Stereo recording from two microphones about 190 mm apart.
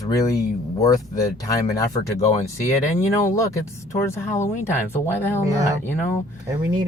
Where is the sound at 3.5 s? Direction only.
15° left (ahead or behind).